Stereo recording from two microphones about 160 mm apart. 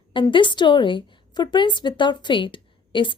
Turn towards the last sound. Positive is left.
turn(degrees=30)  # may be behind; listen again after turning